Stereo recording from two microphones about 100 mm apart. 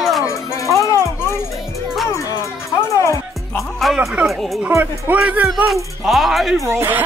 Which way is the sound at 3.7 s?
Centre (ahead or behind).